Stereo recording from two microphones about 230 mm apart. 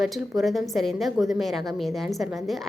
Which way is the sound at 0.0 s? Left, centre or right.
Centre.